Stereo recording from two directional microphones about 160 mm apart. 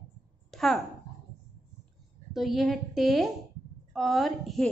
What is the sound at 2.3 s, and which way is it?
A child's voice, centre (ahead or behind).